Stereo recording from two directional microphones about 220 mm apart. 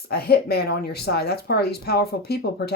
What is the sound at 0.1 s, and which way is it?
Speech, 45° left (ahead or behind).